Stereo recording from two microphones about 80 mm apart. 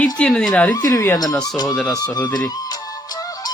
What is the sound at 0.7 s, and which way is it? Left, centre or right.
Speech, left.